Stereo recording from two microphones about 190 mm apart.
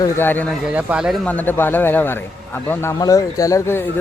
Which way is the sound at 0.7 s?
5° right (ahead or behind).